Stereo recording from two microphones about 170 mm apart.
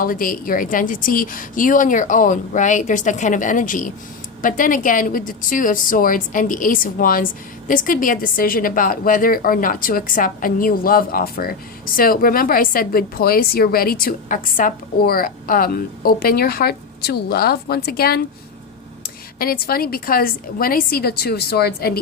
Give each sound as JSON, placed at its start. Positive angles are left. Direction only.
{"t": 0.0, "sound": "a woman's voice", "side_deg": 55}
{"t": 19.4, "sound": "a woman's voice", "side_deg": 60}